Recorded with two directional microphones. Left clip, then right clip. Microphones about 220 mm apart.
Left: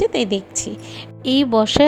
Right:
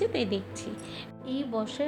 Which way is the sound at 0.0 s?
25° left (ahead or behind).